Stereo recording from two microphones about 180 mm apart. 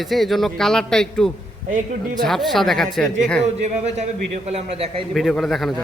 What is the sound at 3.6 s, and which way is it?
A man's voice, 40° right (ahead or behind).